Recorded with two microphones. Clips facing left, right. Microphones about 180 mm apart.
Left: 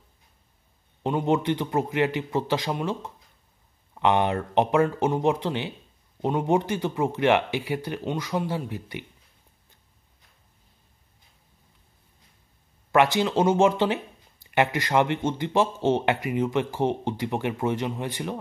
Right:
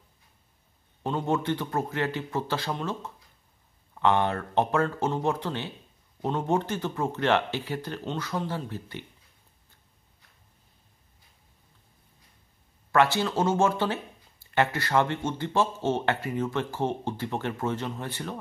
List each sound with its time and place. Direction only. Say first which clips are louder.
1.0 s speech: left 4 dB; 15° left (ahead or behind)
12.9 s speech: left 3 dB; 15° left (ahead or behind)